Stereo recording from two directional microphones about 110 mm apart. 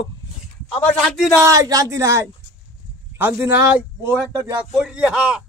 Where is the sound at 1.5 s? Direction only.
35° right (ahead or behind).